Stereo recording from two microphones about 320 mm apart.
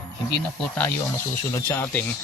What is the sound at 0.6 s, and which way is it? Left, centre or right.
Speech, centre.